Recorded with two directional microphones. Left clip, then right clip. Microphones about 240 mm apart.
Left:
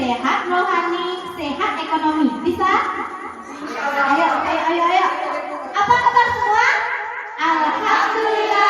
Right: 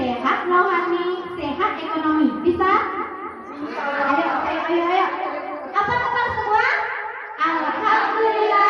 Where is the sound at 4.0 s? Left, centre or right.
Centre.